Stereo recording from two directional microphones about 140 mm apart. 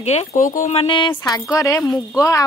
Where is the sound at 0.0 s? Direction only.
50° left (ahead or behind).